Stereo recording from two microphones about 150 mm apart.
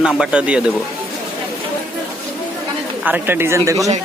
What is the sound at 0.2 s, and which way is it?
Speech, 5° right (ahead or behind).